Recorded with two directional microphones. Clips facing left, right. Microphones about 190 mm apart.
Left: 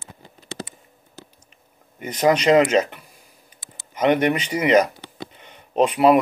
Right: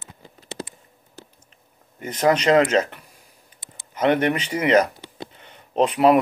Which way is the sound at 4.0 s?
10° left (ahead or behind).